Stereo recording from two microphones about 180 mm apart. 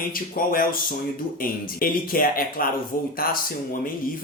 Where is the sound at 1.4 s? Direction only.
50° left (ahead or behind).